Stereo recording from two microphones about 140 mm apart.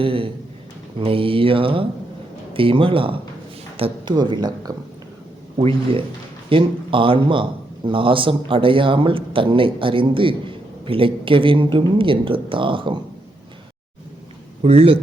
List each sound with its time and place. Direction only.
0.0 s speech: 40° right (ahead or behind)
14.6 s speech: 45° right (ahead or behind)